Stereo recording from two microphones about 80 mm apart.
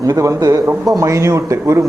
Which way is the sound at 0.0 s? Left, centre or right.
Right.